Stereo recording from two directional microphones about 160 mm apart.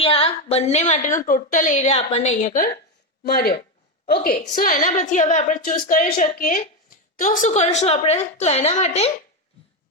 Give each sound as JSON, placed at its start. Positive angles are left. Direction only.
{"t": 0.0, "sound": "a woman's voice", "side_deg": 35}
{"t": 3.2, "sound": "speech", "side_deg": 80}
{"t": 4.0, "sound": "a woman's voice", "side_deg": 70}